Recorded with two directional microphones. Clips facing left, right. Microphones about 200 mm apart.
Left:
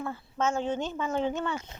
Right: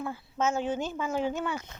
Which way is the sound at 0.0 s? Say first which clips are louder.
Even; 5° right (ahead or behind).